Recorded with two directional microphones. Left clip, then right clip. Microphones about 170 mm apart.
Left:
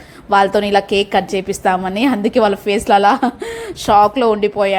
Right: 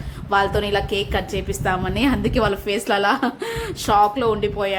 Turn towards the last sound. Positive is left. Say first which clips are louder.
# left 6 dB
turn(degrees=25)  # may be behind; listen again after turning